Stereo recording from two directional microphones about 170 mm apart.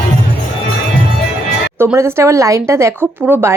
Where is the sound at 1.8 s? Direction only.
15° right (ahead or behind).